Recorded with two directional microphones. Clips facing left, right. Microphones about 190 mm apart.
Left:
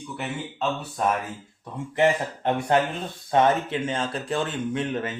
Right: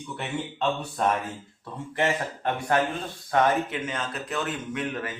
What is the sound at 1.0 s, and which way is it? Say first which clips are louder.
Speech: left 1 dB; 5° left (ahead or behind).